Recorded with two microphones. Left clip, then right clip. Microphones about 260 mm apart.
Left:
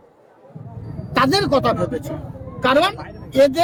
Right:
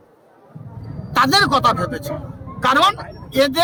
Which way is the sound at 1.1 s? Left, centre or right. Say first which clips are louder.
Right 3 dB; right.